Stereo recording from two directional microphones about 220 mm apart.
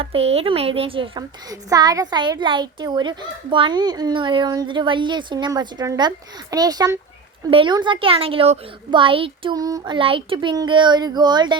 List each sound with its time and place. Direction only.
0.0 s a woman's voice: 25° right (ahead or behind)